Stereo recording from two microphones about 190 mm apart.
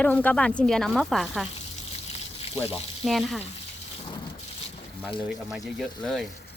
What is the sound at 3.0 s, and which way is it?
Speech, centre (ahead or behind).